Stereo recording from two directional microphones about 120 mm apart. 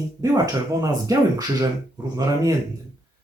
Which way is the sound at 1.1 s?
30° right (ahead or behind).